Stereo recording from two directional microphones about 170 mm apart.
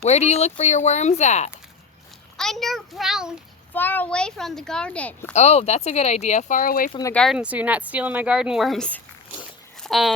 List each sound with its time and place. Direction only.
0.0 s speech: 40° left (ahead or behind)
2.4 s speech: centre (ahead or behind)
3.8 s speech: 10° left (ahead or behind)
5.3 s speech: 40° left (ahead or behind)
7.1 s speech: 5° left (ahead or behind)
7.3 s speech: 10° right (ahead or behind)